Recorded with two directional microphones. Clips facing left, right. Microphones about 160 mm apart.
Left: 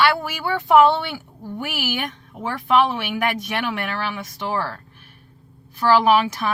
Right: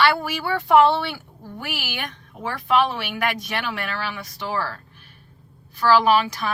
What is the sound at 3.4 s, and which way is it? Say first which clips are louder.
Speech: left 3 dB; 20° left (ahead or behind).